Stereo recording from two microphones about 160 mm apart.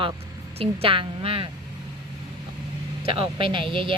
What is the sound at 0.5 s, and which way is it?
Speech, 35° right (ahead or behind).